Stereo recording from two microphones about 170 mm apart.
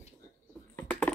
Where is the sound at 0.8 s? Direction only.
10° left (ahead or behind).